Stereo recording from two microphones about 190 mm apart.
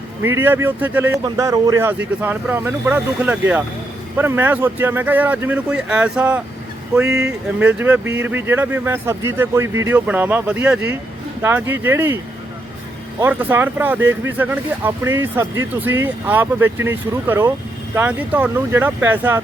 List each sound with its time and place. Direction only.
0.3 s speech: 10° right (ahead or behind)